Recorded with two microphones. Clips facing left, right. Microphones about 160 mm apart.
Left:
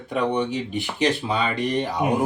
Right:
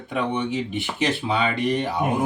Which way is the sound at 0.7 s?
Centre (ahead or behind).